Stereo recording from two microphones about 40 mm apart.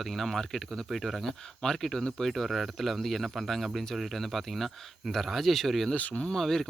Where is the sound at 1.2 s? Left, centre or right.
Centre.